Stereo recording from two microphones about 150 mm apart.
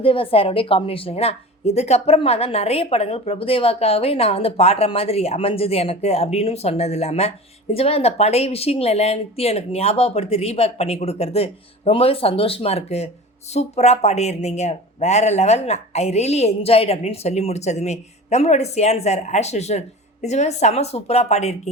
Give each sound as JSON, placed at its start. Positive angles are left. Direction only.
{"t": 0.0, "sound": "a woman's voice", "side_deg": 35}